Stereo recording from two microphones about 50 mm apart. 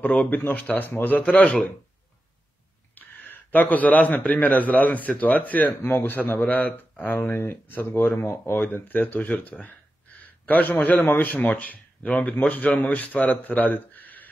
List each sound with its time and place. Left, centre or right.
0.0 s speech: left
1.1 s speech: left
2.9 s a man's voice: left
5.8 s a man's voice: left
6.0 s speech: left